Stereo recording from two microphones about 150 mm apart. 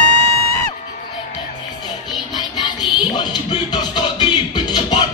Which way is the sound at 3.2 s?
30° left (ahead or behind).